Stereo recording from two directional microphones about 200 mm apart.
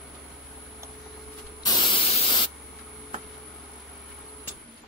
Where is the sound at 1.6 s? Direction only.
20° left (ahead or behind).